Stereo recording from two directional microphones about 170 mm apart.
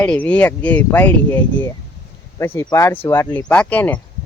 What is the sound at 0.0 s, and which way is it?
Speech, 5° left (ahead or behind).